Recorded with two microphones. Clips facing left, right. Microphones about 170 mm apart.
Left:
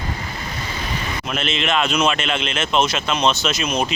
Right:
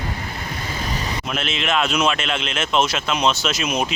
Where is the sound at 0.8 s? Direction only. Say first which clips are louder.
Right 1 dB; 40° right (ahead or behind).